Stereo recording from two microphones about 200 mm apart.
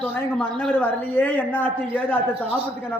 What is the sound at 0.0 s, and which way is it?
Speech, 5° left (ahead or behind).